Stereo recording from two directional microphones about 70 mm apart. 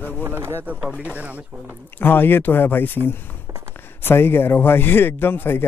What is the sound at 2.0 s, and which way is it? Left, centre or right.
Speech, left.